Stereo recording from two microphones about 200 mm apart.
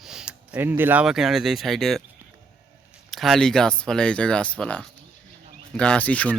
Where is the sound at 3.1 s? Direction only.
Centre (ahead or behind).